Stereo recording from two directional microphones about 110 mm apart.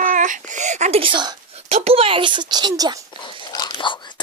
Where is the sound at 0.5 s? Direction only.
90° right.